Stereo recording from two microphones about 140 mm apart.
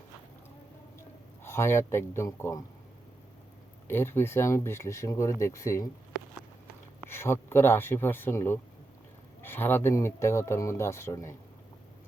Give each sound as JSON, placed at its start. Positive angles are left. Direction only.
{"t": 1.5, "sound": "speech", "side_deg": 20}
{"t": 3.8, "sound": "speech", "side_deg": 15}
{"t": 7.0, "sound": "speech", "side_deg": 15}